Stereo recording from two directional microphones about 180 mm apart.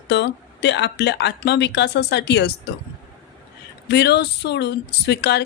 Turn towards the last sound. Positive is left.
turn(degrees=70)  # may be behind; listen again after turning